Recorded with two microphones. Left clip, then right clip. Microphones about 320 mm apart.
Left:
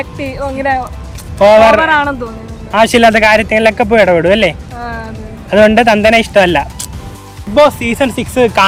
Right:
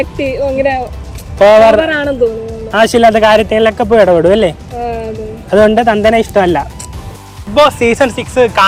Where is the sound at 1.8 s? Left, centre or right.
Left.